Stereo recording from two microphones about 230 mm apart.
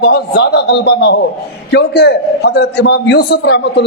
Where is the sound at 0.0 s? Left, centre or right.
Left.